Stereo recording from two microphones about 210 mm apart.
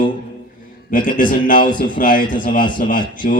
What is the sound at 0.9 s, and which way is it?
A man's voice, 40° left (ahead or behind).